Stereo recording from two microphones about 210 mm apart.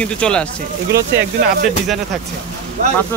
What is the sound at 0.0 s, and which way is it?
Speech, 5° left (ahead or behind).